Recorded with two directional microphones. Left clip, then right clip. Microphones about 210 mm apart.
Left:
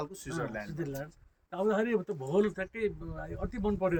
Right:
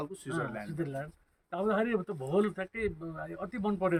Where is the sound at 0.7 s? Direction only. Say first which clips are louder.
Right 1 dB; 5° right (ahead or behind).